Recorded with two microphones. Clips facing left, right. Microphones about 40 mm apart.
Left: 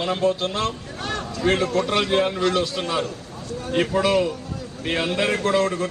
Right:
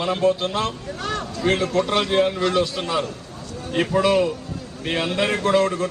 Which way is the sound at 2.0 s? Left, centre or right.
Centre.